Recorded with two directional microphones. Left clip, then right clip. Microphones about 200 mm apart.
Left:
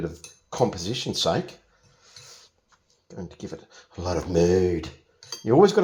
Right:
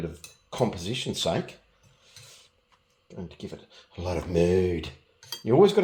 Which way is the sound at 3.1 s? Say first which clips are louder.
Left 3 dB; 25° left (ahead or behind).